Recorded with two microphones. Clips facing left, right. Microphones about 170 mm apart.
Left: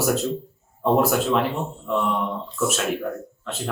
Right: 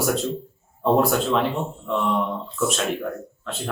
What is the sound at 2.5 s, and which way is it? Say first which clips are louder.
Speech: even; 5° left (ahead or behind).